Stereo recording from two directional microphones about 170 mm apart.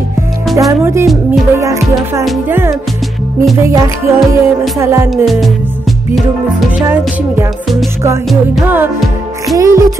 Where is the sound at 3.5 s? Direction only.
15° right (ahead or behind).